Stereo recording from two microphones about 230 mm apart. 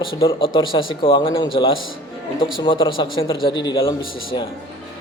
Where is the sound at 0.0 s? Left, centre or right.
Left.